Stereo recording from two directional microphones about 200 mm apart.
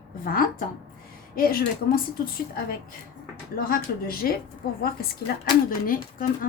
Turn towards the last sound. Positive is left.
turn(degrees=45)  # may be behind; listen again after turning